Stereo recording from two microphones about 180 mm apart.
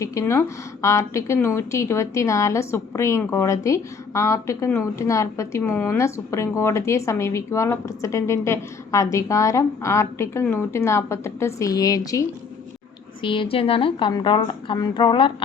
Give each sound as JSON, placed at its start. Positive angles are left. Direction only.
{"t": 0.0, "sound": "a woman's voice", "side_deg": 15}
{"t": 13.2, "sound": "a woman's voice", "side_deg": 30}